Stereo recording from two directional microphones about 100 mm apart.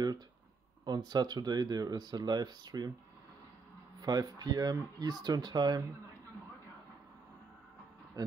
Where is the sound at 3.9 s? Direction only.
40° right (ahead or behind).